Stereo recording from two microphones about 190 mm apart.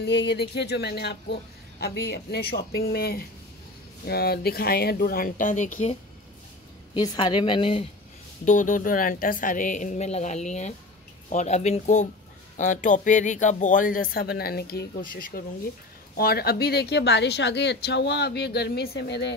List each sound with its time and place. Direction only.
0.0 s a woman's voice: 65° left (ahead or behind); by 5.9 s 40° left (ahead or behind)
7.2 s a woman's voice: 25° left (ahead or behind)
8.5 s a woman's voice: 40° left (ahead or behind); by 19.3 s 65° left (ahead or behind)